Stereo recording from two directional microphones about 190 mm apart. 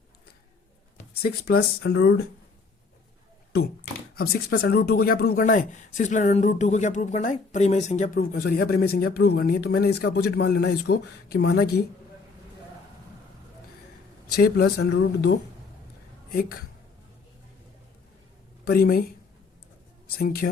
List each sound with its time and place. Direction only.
0.9 s a sound: 55° left (ahead or behind)
1.8 s speech: 65° left (ahead or behind)
4.1 s speech: 55° left (ahead or behind)
14.3 s speech: 55° left (ahead or behind)
16.3 s speech: 50° left (ahead or behind)
18.6 s speech: 55° left (ahead or behind)